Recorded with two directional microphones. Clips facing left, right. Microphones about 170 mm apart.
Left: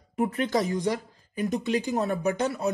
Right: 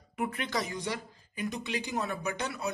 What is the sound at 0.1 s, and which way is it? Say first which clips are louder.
Speech: left 8 dB; 40° left (ahead or behind).